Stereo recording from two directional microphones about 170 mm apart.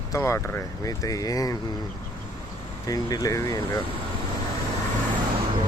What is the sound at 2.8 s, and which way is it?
Speech, 20° left (ahead or behind).